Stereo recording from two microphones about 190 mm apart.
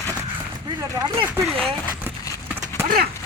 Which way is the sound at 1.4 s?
Centre (ahead or behind).